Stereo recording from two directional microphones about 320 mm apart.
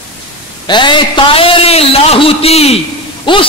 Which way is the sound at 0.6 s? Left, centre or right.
Centre.